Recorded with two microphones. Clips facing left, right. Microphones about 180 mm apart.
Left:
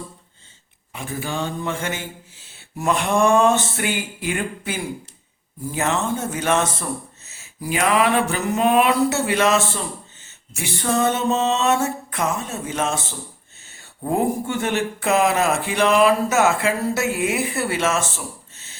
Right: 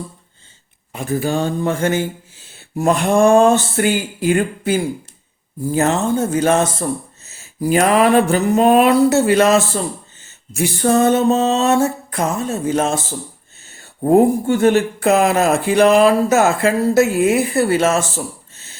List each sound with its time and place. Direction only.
0.9 s speech: 40° right (ahead or behind)
14.0 s speech: 35° right (ahead or behind)